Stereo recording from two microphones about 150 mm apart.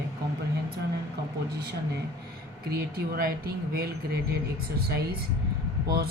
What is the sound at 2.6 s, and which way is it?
Speech, 90° right.